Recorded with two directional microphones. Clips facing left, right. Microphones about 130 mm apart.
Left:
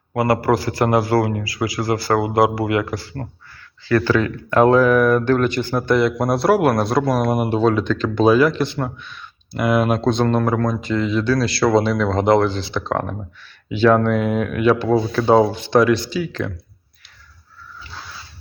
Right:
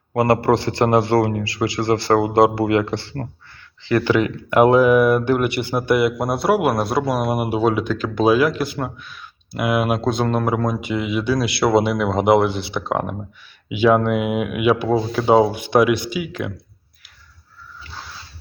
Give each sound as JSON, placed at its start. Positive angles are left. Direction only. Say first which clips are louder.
{"t": 0.1, "sound": "a man's voice", "louder": "right 1 dB", "side_deg": -25}
{"t": 3.8, "sound": "speech", "louder": "even", "side_deg": -20}